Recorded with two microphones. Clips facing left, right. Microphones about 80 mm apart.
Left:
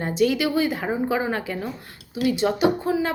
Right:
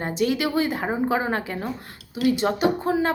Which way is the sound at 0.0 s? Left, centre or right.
Right.